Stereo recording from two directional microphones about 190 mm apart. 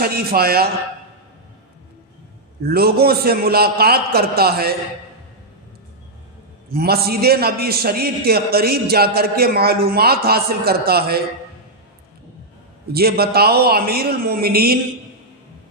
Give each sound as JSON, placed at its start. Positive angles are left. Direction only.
{"t": 0.0, "sound": "a man's voice", "side_deg": -55}
{"t": 2.6, "sound": "a man's voice", "side_deg": -55}
{"t": 6.7, "sound": "a man's voice", "side_deg": -55}
{"t": 12.9, "sound": "a man's voice", "side_deg": -55}